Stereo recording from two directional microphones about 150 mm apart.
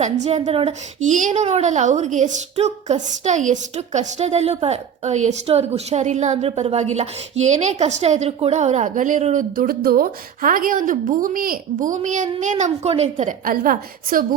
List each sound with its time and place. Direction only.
0.0 s a woman's voice: 50° right (ahead or behind)
1.0 s a woman's voice: 55° right (ahead or behind)
13.4 s a woman's voice: 65° right (ahead or behind)